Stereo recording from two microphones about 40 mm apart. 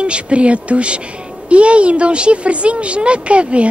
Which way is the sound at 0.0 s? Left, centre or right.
Right.